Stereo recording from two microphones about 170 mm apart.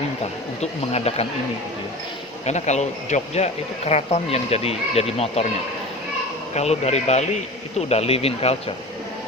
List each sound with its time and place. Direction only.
0.6 s speech: 35° left (ahead or behind)
2.5 s speech: 40° left (ahead or behind)
6.5 s speech: 40° left (ahead or behind)